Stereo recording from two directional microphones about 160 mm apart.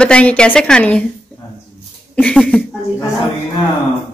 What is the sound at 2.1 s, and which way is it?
Speech, 5° left (ahead or behind).